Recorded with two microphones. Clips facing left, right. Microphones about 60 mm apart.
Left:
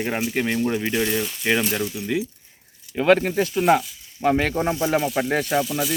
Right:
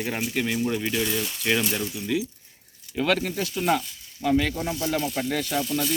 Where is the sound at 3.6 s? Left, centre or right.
Centre.